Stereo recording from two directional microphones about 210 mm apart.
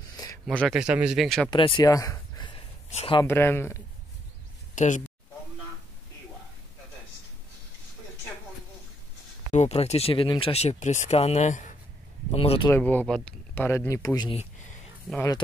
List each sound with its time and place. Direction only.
0.5 s speech: 5° left (ahead or behind)
1.5 s a sound: 25° left (ahead or behind)
3.2 s speech: 10° left (ahead or behind)
4.7 s speech: 35° left (ahead or behind)
9.5 s speech: 30° left (ahead or behind)
12.6 s speech: 10° left (ahead or behind)
14.4 s a sound: 35° left (ahead or behind)